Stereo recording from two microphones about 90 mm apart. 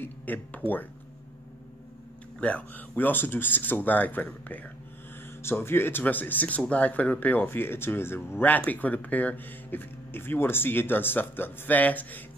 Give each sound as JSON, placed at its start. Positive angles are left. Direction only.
{"t": 0.0, "sound": "speech", "side_deg": 20}
{"t": 2.4, "sound": "speech", "side_deg": 15}